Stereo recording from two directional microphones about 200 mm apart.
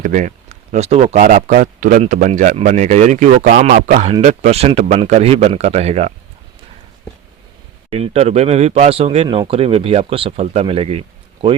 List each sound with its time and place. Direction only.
0.0 s speech: 40° right (ahead or behind)
7.9 s speech: 30° right (ahead or behind)